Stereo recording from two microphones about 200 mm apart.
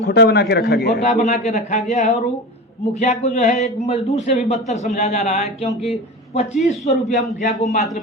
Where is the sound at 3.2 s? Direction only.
35° left (ahead or behind).